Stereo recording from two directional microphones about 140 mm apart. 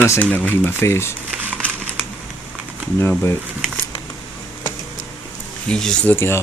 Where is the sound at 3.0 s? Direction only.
15° left (ahead or behind).